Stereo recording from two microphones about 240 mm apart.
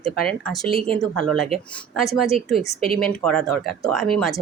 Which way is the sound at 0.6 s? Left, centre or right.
Right.